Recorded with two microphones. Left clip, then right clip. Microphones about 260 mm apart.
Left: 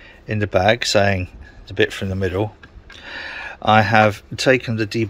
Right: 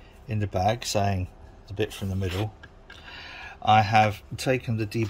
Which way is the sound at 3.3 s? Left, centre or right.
Centre.